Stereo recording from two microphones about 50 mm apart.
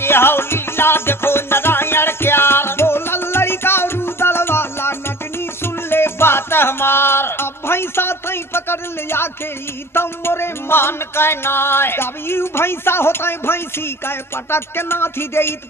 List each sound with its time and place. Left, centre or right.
0.0 s music: left